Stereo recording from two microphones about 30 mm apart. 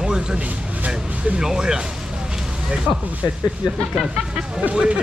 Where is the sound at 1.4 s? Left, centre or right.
Right.